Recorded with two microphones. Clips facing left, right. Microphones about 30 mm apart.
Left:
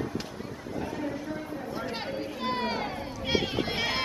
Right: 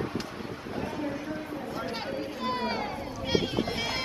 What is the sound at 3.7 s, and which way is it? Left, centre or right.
Music, centre.